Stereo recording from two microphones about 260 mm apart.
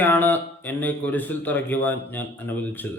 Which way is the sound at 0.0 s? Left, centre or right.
Centre.